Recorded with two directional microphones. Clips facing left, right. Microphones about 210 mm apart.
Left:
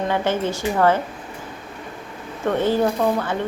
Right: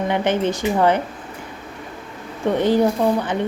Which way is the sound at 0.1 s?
20° right (ahead or behind).